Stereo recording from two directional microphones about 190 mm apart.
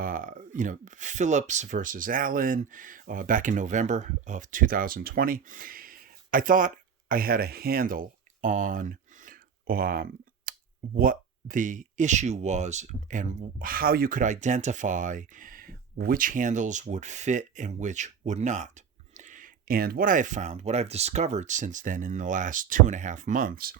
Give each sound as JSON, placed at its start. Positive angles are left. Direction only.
{"t": 0.0, "sound": "speech", "side_deg": -45}